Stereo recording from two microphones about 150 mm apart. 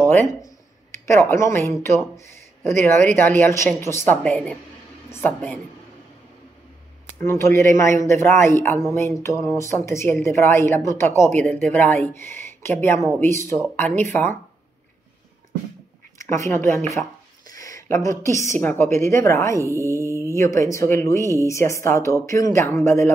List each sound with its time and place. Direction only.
0.1 s speech: 15° left (ahead or behind)
7.2 s speech: 20° left (ahead or behind)
16.2 s a woman's voice: 20° left (ahead or behind)
17.5 s a sound: 20° left (ahead or behind)
18.2 s a woman's voice: 20° left (ahead or behind)
19.6 s mantra: 20° right (ahead or behind)
20.3 s a woman's voice: 20° left (ahead or behind)